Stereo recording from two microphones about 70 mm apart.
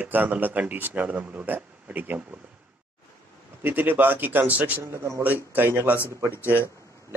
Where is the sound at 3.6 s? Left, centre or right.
Right.